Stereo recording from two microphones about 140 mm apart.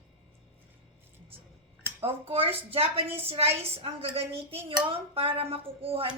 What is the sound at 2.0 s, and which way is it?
A woman's voice, 45° right (ahead or behind).